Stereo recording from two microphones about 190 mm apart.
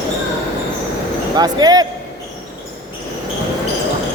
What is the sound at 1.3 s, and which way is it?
Speech, 20° right (ahead or behind).